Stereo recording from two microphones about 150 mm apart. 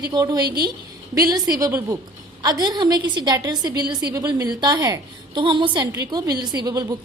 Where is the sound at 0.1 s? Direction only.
25° right (ahead or behind).